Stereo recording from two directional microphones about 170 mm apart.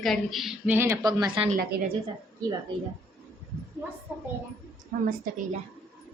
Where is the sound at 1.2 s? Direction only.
30° right (ahead or behind).